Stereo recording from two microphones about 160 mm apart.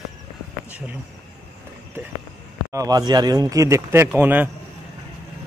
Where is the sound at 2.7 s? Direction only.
20° right (ahead or behind).